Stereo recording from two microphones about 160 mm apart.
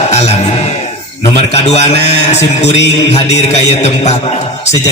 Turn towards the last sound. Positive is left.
turn(degrees=40)  # may be behind; listen again after turning